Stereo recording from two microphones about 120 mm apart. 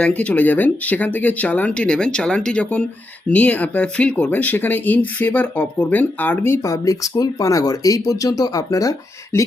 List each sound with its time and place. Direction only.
0.0 s speech: 10° left (ahead or behind); by 9.4 s 30° left (ahead or behind)